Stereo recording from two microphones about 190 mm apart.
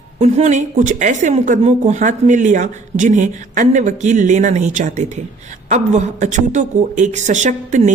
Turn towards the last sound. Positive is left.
turn(degrees=-40)  # may be behind; listen again after turning